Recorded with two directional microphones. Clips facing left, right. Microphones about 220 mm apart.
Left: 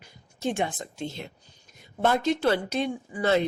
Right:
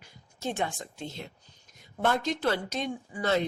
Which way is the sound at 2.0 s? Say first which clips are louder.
Left 4 dB; 15° left (ahead or behind).